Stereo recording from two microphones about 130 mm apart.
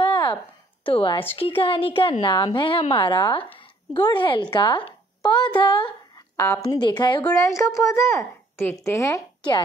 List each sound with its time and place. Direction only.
0.0 s a sound: 40° left (ahead or behind)
0.8 s speech: 40° left (ahead or behind)
6.3 s speech: 20° left (ahead or behind)
7.2 s a woman's voice: 25° left (ahead or behind)